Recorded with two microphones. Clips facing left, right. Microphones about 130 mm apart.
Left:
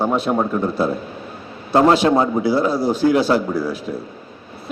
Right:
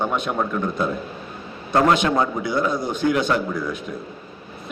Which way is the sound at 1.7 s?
30° left (ahead or behind).